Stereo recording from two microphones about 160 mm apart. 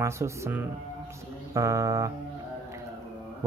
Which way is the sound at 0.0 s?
15° right (ahead or behind).